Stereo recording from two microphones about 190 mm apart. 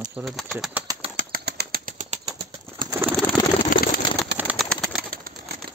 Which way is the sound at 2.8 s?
15° right (ahead or behind).